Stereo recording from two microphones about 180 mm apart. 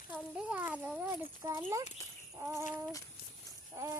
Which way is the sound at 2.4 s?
15° right (ahead or behind).